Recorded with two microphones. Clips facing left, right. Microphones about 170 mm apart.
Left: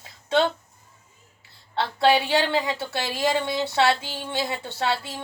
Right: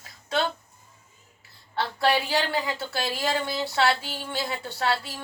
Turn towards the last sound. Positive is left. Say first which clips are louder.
# left 1 dB
turn(degrees=20)  # may be behind; listen again after turning